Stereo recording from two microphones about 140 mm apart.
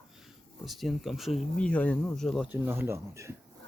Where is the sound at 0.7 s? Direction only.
Centre (ahead or behind).